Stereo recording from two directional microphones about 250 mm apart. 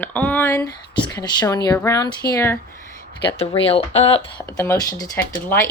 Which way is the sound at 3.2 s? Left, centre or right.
Left.